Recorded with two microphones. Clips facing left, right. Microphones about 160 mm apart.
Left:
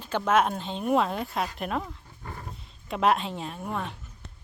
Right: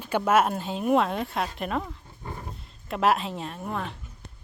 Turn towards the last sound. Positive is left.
turn(degrees=0)  # may be behind; listen again after turning